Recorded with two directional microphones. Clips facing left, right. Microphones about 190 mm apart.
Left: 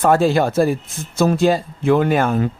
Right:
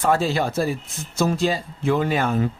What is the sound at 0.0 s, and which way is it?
Speech, 50° left (ahead or behind).